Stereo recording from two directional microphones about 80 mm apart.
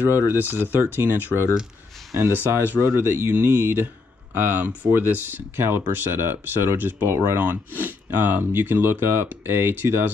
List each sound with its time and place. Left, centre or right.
0.0 s speech: right
2.7 s speech: right